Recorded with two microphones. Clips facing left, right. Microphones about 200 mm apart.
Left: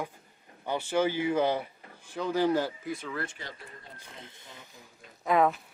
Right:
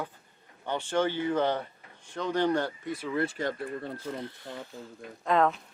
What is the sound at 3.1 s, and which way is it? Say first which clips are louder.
Speech: right 7 dB; 25° right (ahead or behind).